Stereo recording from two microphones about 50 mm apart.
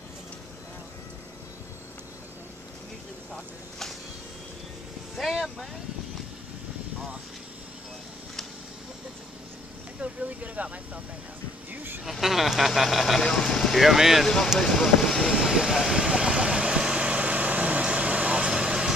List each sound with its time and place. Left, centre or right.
5.1 s speech: centre
9.9 s a sound: right
11.7 s a sound: right
12.0 s speech: centre
14.2 s speech: centre
15.2 s vehicle: centre